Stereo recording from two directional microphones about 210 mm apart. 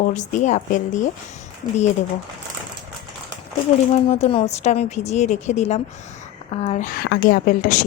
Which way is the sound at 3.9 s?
30° left (ahead or behind).